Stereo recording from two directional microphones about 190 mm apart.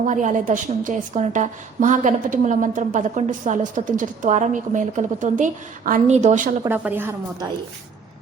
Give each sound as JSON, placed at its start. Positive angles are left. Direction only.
{"t": 0.0, "sound": "a woman's voice", "side_deg": -40}
{"t": 6.7, "sound": "speech", "side_deg": -10}